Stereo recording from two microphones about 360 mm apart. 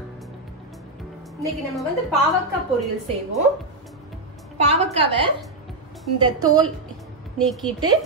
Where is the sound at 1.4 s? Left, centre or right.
Centre.